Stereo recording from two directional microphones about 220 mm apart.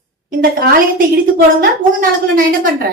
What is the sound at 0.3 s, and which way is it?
Speech, 40° right (ahead or behind).